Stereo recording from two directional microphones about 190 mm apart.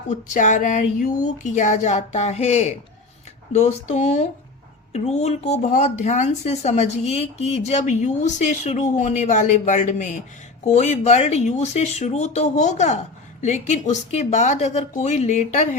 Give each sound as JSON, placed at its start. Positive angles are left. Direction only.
{"t": 0.1, "sound": "a woman's voice", "side_deg": 40}